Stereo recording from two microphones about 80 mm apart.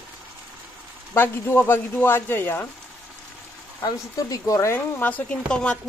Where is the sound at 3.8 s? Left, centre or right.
Left.